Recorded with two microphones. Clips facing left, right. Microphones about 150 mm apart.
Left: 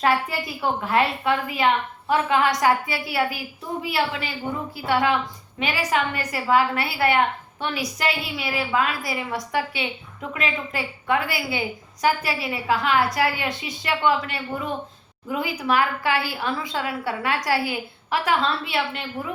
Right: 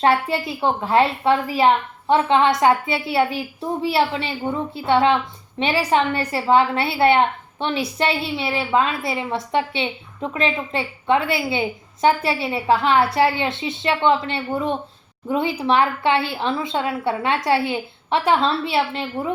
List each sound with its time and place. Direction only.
0.0 s a woman's voice: 30° right (ahead or behind)